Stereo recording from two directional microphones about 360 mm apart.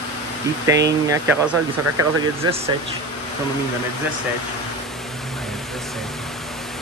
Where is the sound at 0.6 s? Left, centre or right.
Centre.